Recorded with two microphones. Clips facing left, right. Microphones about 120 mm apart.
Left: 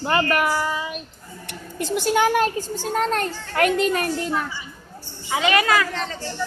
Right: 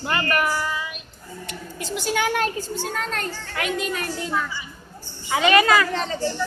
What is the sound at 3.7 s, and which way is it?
Speech, 60° left (ahead or behind).